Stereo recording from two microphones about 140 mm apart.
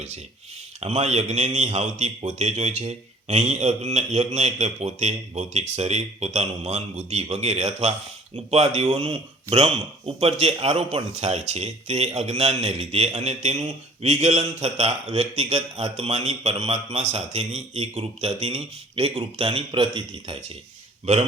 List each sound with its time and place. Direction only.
0.8 s speech: 50° right (ahead or behind)